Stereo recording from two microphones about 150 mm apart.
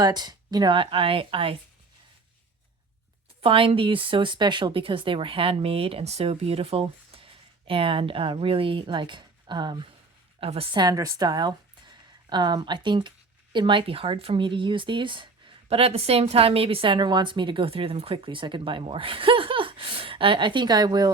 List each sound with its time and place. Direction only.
0.0 s speech: 25° right (ahead or behind)
3.4 s speech: 35° right (ahead or behind)